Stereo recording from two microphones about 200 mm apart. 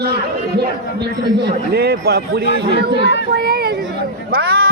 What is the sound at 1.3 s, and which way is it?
A man's voice, 55° right (ahead or behind).